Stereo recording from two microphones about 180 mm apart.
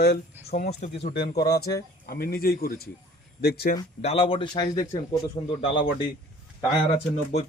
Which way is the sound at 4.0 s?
35° left (ahead or behind).